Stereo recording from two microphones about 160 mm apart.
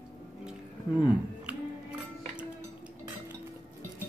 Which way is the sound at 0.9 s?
10° right (ahead or behind).